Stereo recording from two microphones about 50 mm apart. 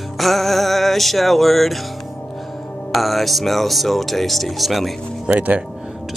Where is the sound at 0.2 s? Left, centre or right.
Centre.